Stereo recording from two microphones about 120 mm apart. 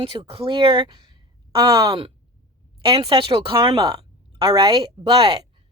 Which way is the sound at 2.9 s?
40° right (ahead or behind).